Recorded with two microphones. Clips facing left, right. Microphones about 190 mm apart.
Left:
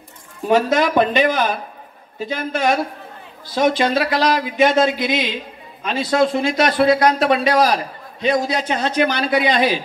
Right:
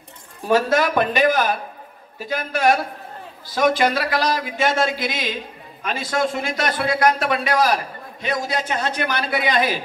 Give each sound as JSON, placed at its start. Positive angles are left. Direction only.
{"t": 0.5, "sound": "a man's voice", "side_deg": 20}